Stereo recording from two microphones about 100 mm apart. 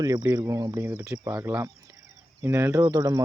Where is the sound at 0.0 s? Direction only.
40° right (ahead or behind).